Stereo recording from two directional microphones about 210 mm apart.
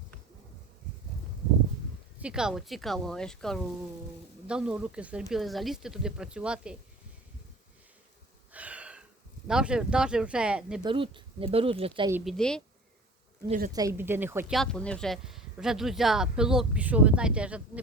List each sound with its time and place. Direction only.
2.1 s speech: 5° right (ahead or behind)
8.5 s a sound: 5° right (ahead or behind)
9.5 s speech: 5° right (ahead or behind)
10.8 s speech: 25° right (ahead or behind)
12.1 s speech: centre (ahead or behind)
13.7 s speech: 15° right (ahead or behind)
14.5 s speech: 5° left (ahead or behind)